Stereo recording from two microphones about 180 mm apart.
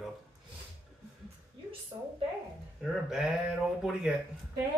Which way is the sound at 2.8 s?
Centre (ahead or behind).